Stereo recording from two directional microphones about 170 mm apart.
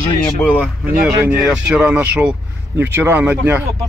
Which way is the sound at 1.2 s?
5° right (ahead or behind).